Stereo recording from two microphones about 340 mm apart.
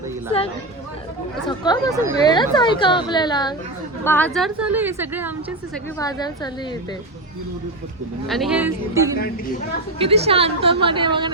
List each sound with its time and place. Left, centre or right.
1.5 s a woman's voice: centre
6.0 s speech: centre
8.3 s a woman's voice: centre
9.1 s a woman's voice: left
10.0 s a woman's voice: centre